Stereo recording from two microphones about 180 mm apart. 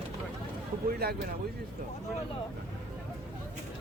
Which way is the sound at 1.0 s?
60° right (ahead or behind).